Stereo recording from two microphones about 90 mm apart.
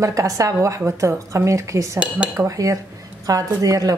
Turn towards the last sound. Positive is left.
turn(degrees=-40)  # may be behind; listen again after turning